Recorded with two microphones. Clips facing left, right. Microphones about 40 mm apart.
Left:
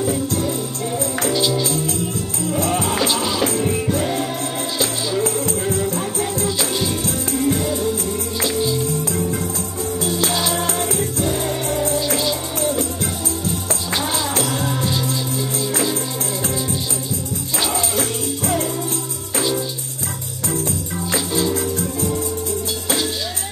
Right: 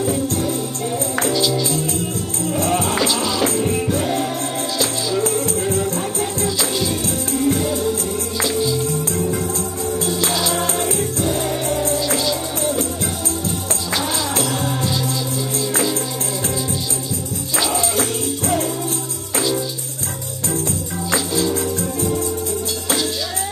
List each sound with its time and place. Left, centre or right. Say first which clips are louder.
1.3 s music: left 1 dB; centre
2.5 s music: right 1 dB; centre
3.0 s music: right 1 dB; centre
5.7 s music: right 1 dB; left
6.6 s music: even; centre
11.0 s music: right 1 dB; centre
14.4 s music: even; centre
17.6 s music: right 2 dB; centre
21.4 s music: left 1 dB; centre